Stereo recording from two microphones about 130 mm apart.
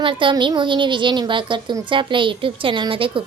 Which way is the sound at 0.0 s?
40° right (ahead or behind).